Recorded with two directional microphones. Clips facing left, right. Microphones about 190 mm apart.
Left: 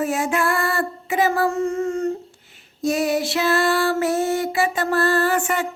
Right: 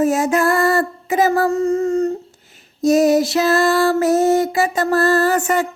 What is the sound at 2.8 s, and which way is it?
Music, 40° right (ahead or behind).